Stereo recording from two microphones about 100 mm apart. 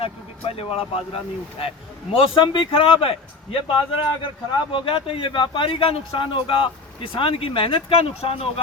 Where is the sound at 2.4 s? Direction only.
55° left (ahead or behind).